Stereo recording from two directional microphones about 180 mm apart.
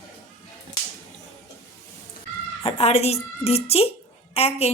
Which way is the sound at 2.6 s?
35° left (ahead or behind).